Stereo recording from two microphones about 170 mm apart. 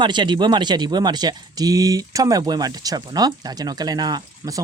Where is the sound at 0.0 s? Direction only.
25° right (ahead or behind).